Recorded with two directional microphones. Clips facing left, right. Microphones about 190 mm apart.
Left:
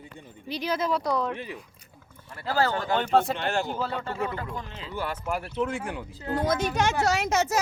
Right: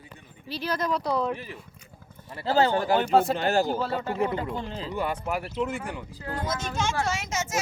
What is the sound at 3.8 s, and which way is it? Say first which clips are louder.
Speech: right 3 dB; 5° right (ahead or behind).